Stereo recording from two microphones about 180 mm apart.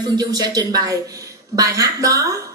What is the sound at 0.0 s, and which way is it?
A woman's voice, 20° right (ahead or behind).